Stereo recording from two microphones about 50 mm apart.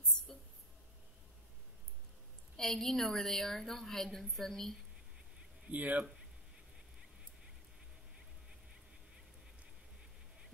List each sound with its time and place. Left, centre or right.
2.5 s a woman's voice: centre
5.7 s speech: right